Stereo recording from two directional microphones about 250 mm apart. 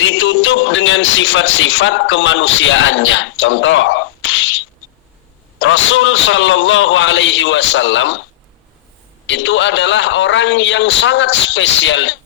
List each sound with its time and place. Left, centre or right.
0.0 s a man's voice: left
9.2 s a man's voice: left